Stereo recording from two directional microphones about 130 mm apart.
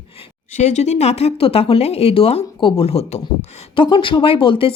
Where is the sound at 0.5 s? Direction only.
65° left (ahead or behind).